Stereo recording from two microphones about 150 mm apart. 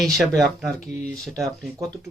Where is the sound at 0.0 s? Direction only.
Centre (ahead or behind).